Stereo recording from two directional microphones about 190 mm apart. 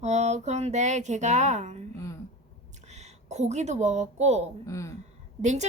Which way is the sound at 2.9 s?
35° right (ahead or behind).